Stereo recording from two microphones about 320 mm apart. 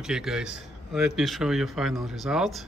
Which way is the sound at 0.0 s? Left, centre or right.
Centre.